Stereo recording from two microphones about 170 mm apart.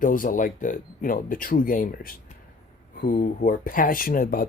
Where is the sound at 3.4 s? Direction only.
55° left (ahead or behind).